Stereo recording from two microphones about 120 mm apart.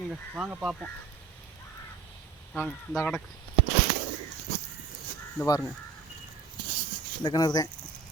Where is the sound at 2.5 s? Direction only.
5° left (ahead or behind).